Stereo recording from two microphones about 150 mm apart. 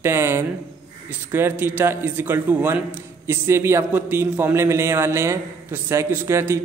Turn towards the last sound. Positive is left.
turn(degrees=-20)  # may be behind; listen again after turning